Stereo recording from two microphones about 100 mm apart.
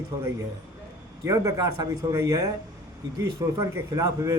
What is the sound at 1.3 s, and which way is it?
Speech, 35° right (ahead or behind).